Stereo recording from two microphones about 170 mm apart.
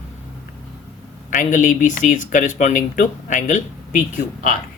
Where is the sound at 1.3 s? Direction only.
50° left (ahead or behind).